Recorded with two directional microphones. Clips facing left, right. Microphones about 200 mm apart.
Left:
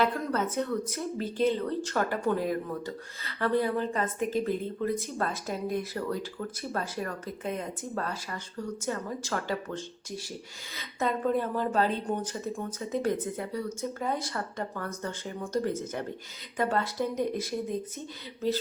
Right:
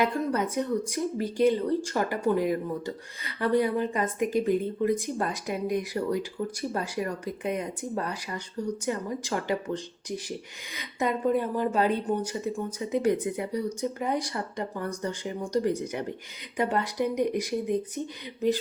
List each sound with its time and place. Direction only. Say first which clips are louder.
0.0 s a woman's voice: right 2 dB; 15° right (ahead or behind)